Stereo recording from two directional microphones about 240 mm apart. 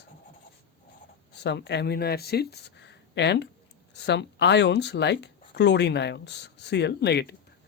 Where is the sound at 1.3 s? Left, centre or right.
Left.